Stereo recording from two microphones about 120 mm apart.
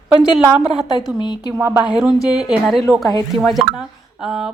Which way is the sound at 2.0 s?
5° right (ahead or behind).